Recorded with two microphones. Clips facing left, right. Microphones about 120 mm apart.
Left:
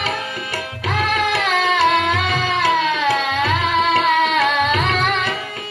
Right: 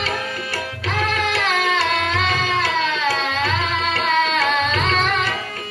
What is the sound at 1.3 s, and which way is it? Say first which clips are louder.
Music: left 2 dB; 20° left (ahead or behind).